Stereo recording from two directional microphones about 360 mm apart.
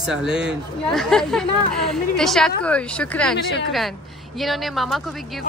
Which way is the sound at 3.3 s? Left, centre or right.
Left.